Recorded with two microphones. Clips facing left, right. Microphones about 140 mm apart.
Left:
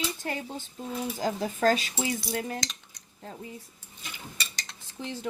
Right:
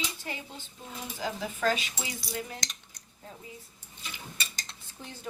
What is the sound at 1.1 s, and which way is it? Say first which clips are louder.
Speech: left 3 dB; 40° left (ahead or behind).